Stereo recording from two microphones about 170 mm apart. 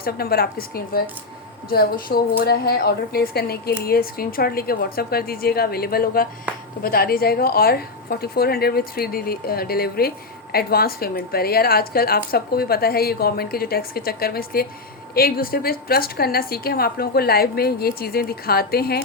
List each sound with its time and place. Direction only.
0.0 s a woman's voice: 65° left (ahead or behind)